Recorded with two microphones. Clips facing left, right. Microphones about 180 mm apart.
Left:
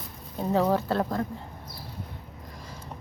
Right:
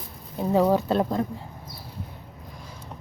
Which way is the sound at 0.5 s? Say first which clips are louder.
Right 4 dB; 15° right (ahead or behind).